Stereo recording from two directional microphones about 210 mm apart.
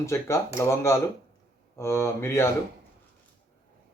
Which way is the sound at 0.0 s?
15° left (ahead or behind).